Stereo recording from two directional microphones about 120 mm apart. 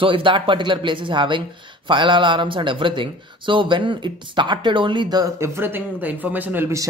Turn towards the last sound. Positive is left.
turn(degrees=-15)  # may be behind; listen again after turning